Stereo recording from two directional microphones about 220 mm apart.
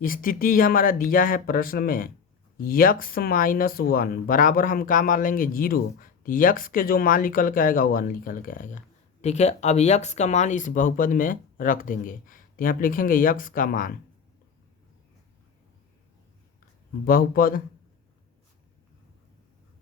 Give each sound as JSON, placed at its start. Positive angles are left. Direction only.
{"t": 0.0, "sound": "speech", "side_deg": 40}
{"t": 17.1, "sound": "speech", "side_deg": 40}